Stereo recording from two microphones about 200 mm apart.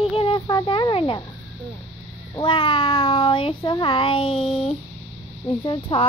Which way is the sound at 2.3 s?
25° left (ahead or behind).